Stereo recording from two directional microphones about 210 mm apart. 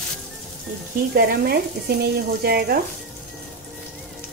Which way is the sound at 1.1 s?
50° right (ahead or behind).